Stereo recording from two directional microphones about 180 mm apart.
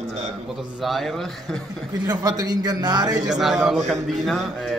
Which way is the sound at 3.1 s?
5° right (ahead or behind).